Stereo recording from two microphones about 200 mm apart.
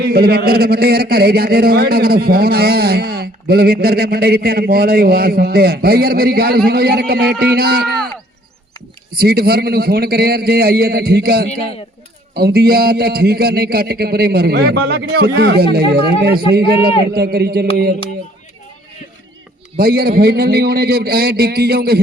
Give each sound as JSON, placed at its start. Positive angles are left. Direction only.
{"t": 0.1, "sound": "a man's voice", "side_deg": -50}
{"t": 9.1, "sound": "a man's voice", "side_deg": -50}
{"t": 19.7, "sound": "a man's voice", "side_deg": -50}